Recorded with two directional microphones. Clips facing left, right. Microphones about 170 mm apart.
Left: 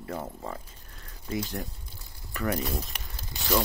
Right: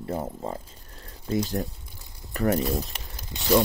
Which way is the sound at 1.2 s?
35° right (ahead or behind).